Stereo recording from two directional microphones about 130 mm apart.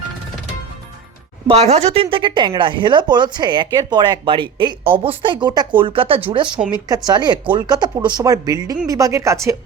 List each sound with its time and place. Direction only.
1.5 s speech: 55° right (ahead or behind)
6.8 s speech: 30° right (ahead or behind)